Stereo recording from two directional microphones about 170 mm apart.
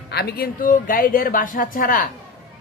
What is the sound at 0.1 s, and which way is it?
A man's voice, 70° left (ahead or behind).